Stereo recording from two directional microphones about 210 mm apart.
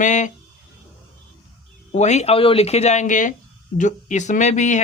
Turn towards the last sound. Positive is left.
turn(degrees=35)  # may be behind; listen again after turning